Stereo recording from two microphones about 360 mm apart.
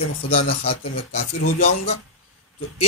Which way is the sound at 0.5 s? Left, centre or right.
Centre.